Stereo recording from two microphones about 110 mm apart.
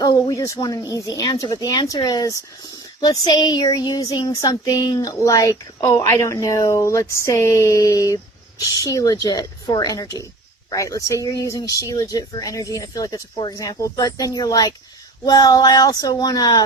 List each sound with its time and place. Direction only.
0.0 s child singing: 30° left (ahead or behind)
13.6 s child singing: 30° left (ahead or behind)